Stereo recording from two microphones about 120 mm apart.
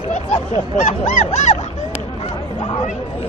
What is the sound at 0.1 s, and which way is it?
Honk, 85° left.